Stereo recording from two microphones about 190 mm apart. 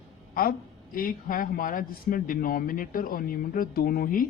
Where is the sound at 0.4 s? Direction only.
50° left (ahead or behind).